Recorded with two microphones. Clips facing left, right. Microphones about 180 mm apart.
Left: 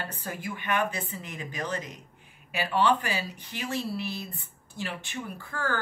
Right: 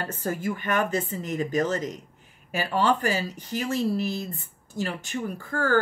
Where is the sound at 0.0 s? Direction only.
45° right (ahead or behind).